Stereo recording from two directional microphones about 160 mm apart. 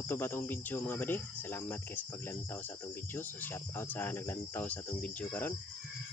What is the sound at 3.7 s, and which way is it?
Speech, 10° left (ahead or behind).